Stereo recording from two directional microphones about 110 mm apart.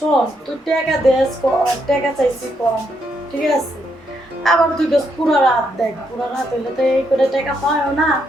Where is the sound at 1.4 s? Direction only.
20° left (ahead or behind).